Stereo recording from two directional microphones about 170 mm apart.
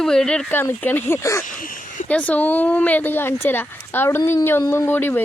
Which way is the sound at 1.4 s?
50° left (ahead or behind).